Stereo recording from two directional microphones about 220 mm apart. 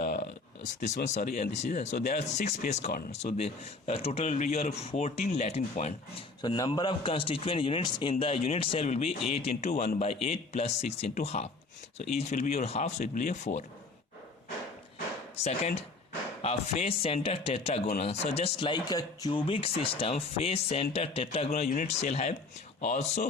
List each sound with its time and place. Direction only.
0.2 s a sound: 35° left (ahead or behind)
1.0 s speech: 35° left (ahead or behind)
6.4 s speech: 20° left (ahead or behind)
15.4 s speech: 25° left (ahead or behind)